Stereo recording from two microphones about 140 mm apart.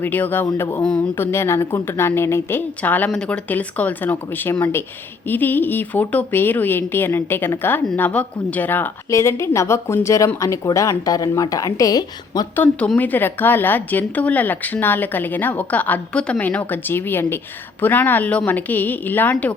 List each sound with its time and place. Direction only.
0.0 s speech: 15° left (ahead or behind)
0.4 s a sound: 20° left (ahead or behind)
0.8 s speech: 10° left (ahead or behind); by 12.5 s 25° left (ahead or behind)
12.5 s speech: 10° left (ahead or behind)